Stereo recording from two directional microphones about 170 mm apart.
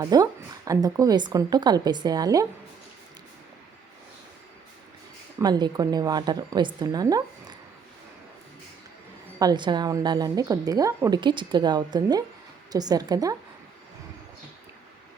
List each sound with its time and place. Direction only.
0.0 s a woman's voice: 20° right (ahead or behind)
5.4 s a woman's voice: 25° right (ahead or behind)
9.4 s a woman's voice: 25° right (ahead or behind)